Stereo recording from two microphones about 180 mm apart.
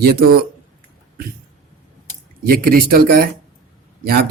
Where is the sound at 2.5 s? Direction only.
55° right (ahead or behind).